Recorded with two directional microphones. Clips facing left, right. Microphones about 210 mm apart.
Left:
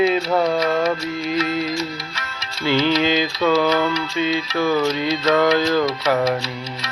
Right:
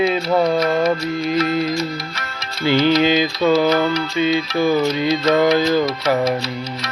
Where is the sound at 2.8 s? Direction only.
5° right (ahead or behind).